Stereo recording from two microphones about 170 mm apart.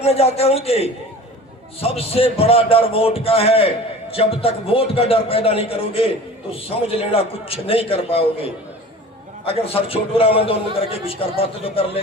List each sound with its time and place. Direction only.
0.0 s a man's voice: 35° left (ahead or behind)